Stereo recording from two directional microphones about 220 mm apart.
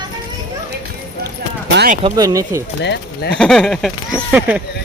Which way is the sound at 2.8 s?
50° left (ahead or behind).